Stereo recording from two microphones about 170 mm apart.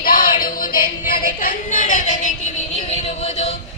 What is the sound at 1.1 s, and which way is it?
Speech, 55° left (ahead or behind).